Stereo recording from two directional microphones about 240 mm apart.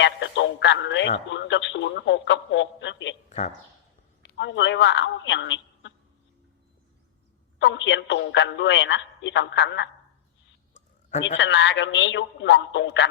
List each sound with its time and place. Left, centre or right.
0.0 s a man's voice: left
3.2 s speech: left
4.4 s a man's voice: left
7.6 s a man's voice: left
11.2 s a man's voice: left